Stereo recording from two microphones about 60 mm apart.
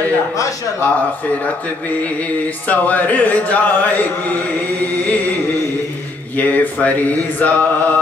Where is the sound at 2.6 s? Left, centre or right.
Left.